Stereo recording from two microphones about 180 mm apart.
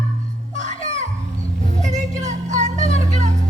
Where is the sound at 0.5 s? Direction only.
40° right (ahead or behind).